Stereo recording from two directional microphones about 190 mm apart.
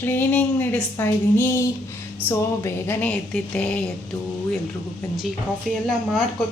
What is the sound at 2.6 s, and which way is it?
Speech, 10° left (ahead or behind).